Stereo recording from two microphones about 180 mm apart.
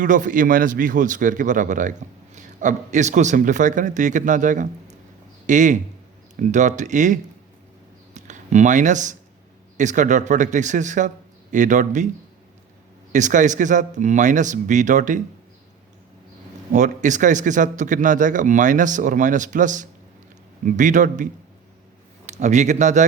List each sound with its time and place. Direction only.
0.0 s speech: 45° right (ahead or behind)
8.1 s a sound: 40° right (ahead or behind)
9.7 s speech: 45° right (ahead or behind)
13.1 s speech: 45° right (ahead or behind)
16.7 s speech: 45° right (ahead or behind)
22.3 s speech: 40° right (ahead or behind)